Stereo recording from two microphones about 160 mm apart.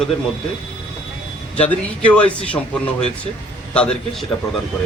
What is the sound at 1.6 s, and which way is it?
A man's voice, 5° left (ahead or behind).